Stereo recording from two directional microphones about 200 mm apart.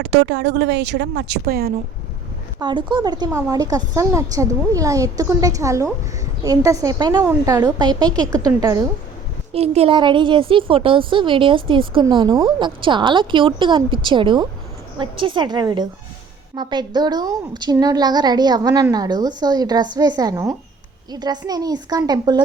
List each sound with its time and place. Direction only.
0.0 s a woman's voice: 65° right (ahead or behind); by 1.7 s 50° right (ahead or behind)
2.6 s a woman's voice: 25° right (ahead or behind)
9.5 s a woman's voice: 30° right (ahead or behind)